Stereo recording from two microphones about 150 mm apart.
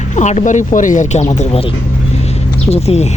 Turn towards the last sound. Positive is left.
turn(degrees=45)  # may be behind; listen again after turning